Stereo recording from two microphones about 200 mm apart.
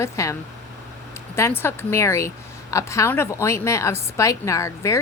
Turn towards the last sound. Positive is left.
turn(degrees=15)  # may be behind; listen again after turning